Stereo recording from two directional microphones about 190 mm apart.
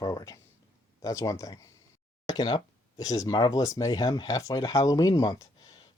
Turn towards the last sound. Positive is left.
turn(degrees=20)  # may be behind; listen again after turning